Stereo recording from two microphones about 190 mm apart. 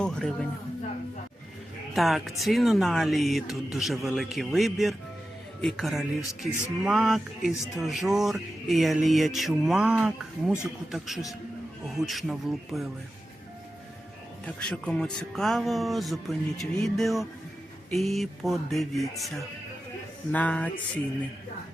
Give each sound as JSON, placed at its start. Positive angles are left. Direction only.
{"t": 0.0, "sound": "a sound", "side_deg": 5}
{"t": 2.0, "sound": "speech", "side_deg": 0}
{"t": 14.4, "sound": "speech", "side_deg": 5}
{"t": 20.3, "sound": "music", "side_deg": 5}